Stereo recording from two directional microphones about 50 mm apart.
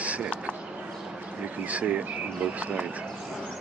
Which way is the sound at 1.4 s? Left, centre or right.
Right.